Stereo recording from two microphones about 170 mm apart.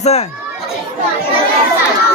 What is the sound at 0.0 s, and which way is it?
Speech, 40° left (ahead or behind).